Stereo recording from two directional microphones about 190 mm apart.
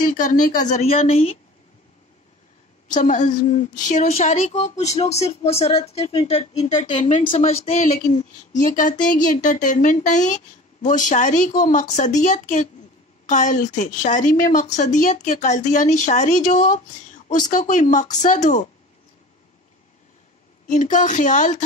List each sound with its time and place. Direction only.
0.0 s a woman's voice: 40° left (ahead or behind)
2.9 s a woman's voice: 40° left (ahead or behind)
20.6 s a woman's voice: 40° left (ahead or behind)